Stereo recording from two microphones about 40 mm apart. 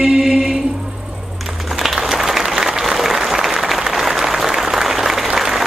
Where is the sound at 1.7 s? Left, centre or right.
Centre.